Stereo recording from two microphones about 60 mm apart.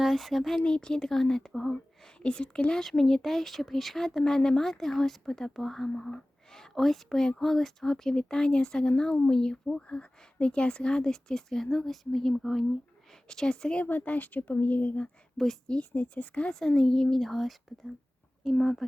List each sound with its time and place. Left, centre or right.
0.0 s speech: centre
0.6 s speech: centre
2.1 s speech: centre
5.9 s speech: centre
6.5 s speech: centre